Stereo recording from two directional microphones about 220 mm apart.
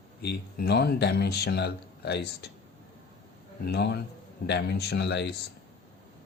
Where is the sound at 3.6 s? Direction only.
50° left (ahead or behind).